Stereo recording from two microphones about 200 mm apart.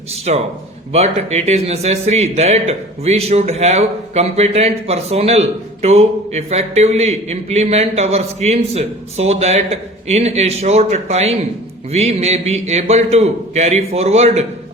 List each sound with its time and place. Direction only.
0.1 s speech: 30° right (ahead or behind)